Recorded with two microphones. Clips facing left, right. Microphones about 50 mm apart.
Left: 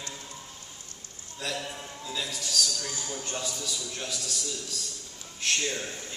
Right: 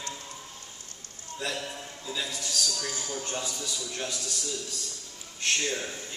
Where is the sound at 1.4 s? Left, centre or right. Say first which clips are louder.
Even; centre.